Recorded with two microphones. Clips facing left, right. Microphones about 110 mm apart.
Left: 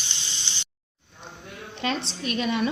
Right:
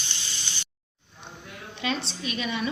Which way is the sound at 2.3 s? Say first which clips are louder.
Left 5 dB; 40° left (ahead or behind).